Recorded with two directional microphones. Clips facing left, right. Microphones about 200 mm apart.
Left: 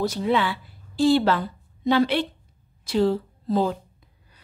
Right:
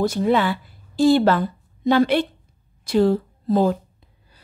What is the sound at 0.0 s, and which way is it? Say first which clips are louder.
A woman's voice: right 4 dB; 50° right (ahead or behind).